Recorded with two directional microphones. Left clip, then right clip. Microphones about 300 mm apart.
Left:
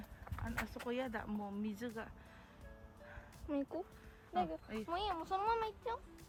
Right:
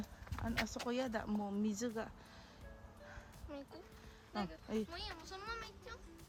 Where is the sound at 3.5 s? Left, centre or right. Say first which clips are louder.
Left 10 dB; left.